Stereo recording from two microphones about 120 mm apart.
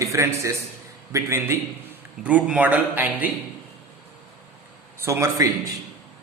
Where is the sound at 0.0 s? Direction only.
25° right (ahead or behind).